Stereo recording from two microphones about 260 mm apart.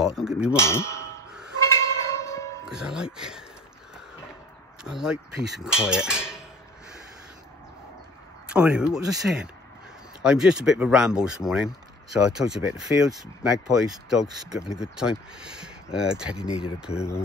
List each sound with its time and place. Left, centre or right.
0.0 s a sound: centre
0.6 s clang: centre
1.7 s a sound: centre
2.6 s speech: centre
4.8 s speech: centre
8.5 s speech: centre
16.9 s speech: left